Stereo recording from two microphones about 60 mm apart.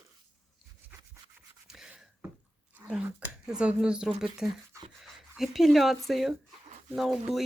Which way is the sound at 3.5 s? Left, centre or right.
Centre.